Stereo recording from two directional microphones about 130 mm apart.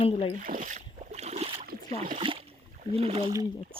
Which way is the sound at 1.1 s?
55° right (ahead or behind).